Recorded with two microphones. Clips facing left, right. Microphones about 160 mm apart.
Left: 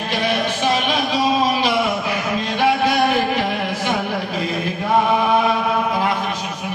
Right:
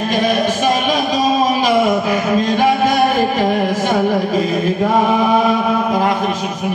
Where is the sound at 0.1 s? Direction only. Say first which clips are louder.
Right 4 dB; 45° right (ahead or behind).